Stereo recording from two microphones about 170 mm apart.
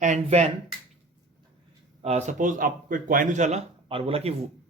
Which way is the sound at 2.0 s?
40° right (ahead or behind).